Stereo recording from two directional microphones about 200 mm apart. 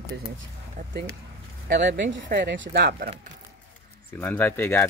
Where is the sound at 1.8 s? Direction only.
60° right (ahead or behind).